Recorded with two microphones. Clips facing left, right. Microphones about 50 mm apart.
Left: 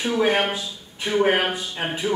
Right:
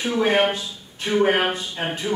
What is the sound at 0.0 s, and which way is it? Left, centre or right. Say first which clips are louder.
A man's voice: right 1 dB; centre.